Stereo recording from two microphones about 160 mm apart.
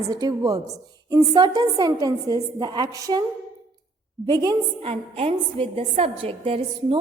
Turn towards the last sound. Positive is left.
turn(degrees=-35)  # may be behind; listen again after turning